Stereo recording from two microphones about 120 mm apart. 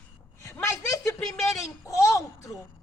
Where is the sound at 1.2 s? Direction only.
Centre (ahead or behind).